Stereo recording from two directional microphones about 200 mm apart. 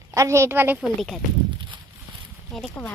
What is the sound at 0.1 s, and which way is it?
Speech, 15° right (ahead or behind).